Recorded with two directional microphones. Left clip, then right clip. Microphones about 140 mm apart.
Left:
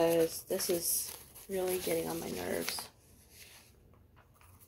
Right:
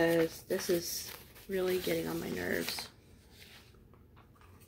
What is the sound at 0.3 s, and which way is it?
Speech, 20° right (ahead or behind).